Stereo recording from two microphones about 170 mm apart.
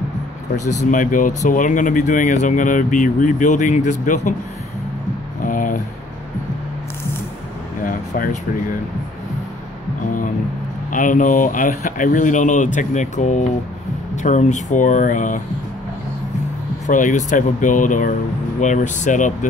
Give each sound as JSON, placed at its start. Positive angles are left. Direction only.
{"t": 0.7, "sound": "speech", "side_deg": 45}
{"t": 5.4, "sound": "a sound", "side_deg": 50}
{"t": 7.8, "sound": "air conditioning", "side_deg": 50}
{"t": 10.9, "sound": "speech", "side_deg": 50}
{"t": 16.8, "sound": "speech", "side_deg": 50}